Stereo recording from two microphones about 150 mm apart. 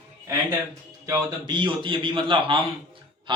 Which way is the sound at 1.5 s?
30° right (ahead or behind).